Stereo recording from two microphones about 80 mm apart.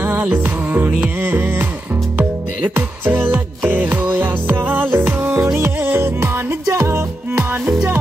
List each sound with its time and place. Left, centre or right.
0.0 s music: right